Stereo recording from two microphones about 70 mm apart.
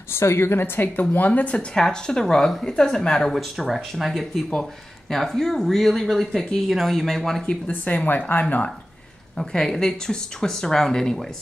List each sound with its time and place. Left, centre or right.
0.1 s a woman's voice: left; by 7.7 s centre
7.8 s speech: left
9.4 s speech: centre